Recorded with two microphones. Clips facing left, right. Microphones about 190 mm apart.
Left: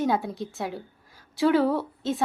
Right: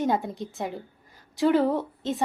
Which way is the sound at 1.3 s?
15° right (ahead or behind).